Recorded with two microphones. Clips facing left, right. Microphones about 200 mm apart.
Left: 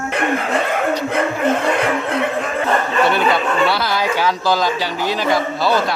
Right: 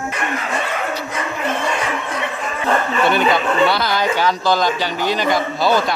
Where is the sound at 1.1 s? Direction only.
60° left (ahead or behind).